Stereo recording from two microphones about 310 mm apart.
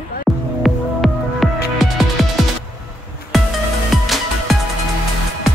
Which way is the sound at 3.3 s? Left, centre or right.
Centre.